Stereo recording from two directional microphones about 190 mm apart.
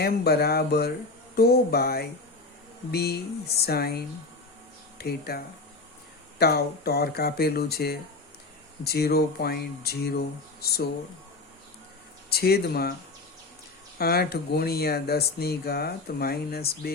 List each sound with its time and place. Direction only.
0.0 s speech: 55° left (ahead or behind)
6.4 s speech: 55° left (ahead or behind)
12.3 s speech: 55° left (ahead or behind)
14.0 s speech: 55° left (ahead or behind)